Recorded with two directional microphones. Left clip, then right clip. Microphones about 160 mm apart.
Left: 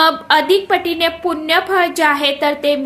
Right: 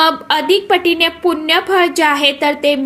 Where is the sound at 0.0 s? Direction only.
20° right (ahead or behind).